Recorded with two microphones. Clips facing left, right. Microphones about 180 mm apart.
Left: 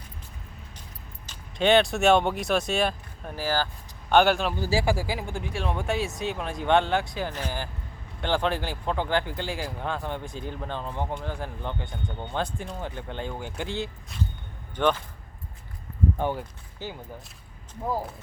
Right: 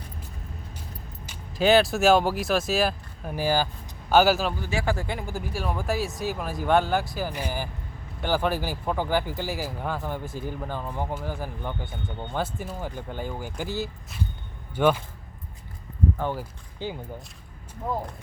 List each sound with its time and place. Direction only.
1.3 s speech: 5° right (ahead or behind)
3.3 s speech: 15° right (ahead or behind)
4.1 s speech: 5° right (ahead or behind)
4.5 s speech: 30° left (ahead or behind)
4.9 s speech: 5° left (ahead or behind)
16.7 s speech: 15° right (ahead or behind)
17.8 s speech: 5° left (ahead or behind)